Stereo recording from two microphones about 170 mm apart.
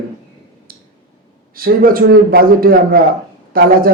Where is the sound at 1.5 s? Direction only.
55° right (ahead or behind).